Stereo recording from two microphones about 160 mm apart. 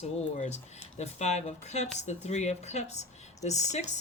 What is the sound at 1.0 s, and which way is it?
Speech, 45° left (ahead or behind).